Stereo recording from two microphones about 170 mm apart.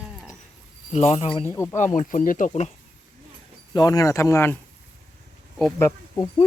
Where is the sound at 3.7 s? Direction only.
25° left (ahead or behind).